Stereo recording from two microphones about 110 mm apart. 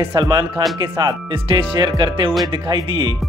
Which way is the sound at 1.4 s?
50° right (ahead or behind).